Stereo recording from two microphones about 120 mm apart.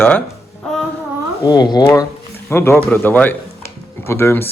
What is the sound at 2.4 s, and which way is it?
Speech, 20° left (ahead or behind).